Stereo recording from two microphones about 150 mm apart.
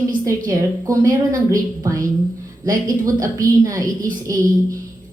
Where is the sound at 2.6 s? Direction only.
25° right (ahead or behind).